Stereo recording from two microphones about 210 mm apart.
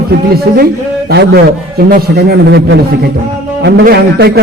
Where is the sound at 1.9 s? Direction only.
45° right (ahead or behind).